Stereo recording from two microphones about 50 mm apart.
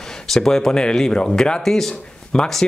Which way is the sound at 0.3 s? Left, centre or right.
Centre.